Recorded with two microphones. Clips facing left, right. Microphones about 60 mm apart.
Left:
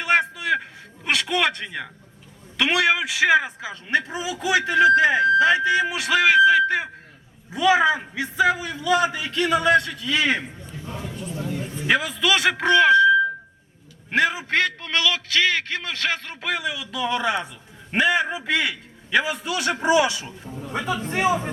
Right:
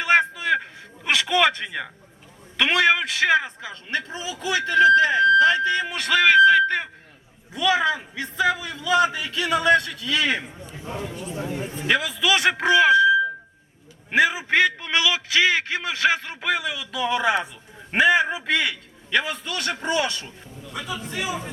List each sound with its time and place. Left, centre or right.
0.0 s a sound: centre
2.6 s a man's voice: centre
7.5 s a man's voice: centre
10.8 s speech: right
11.0 s a man's voice: centre
11.3 s speech: right
11.9 s a man's voice: centre
20.5 s a man's voice: left